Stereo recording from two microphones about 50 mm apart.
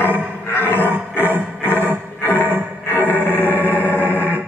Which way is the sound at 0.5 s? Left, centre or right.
Left.